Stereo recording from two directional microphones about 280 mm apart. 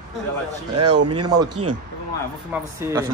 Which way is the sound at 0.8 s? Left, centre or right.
Right.